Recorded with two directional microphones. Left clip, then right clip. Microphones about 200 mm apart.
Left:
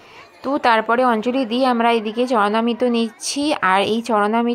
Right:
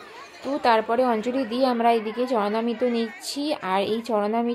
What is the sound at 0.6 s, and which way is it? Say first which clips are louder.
A woman's voice: left 4 dB; 5° left (ahead or behind).